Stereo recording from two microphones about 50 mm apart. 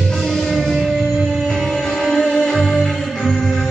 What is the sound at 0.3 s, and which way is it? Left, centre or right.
Music, centre.